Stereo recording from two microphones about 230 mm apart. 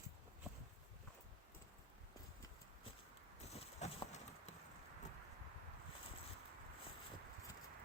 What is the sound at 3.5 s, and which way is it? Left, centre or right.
Horse, left.